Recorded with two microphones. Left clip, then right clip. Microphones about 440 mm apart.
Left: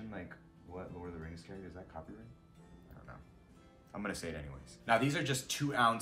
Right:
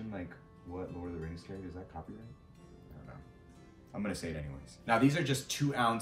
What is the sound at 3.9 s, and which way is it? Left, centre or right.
Speech, centre.